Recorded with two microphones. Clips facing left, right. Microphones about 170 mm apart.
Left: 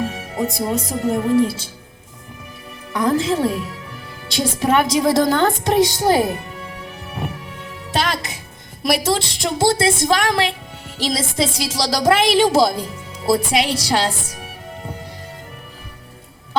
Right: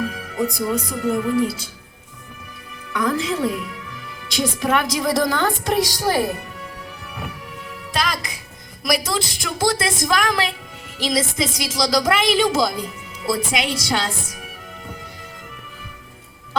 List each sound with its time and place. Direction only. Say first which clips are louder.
0.0 s speech: left 1 dB; 30° left (ahead or behind)
2.9 s a woman's voice: left 4 dB; 30° left (ahead or behind)
7.9 s music: left 3 dB; 25° left (ahead or behind)
8.8 s a woman's voice: left 3 dB; 25° left (ahead or behind)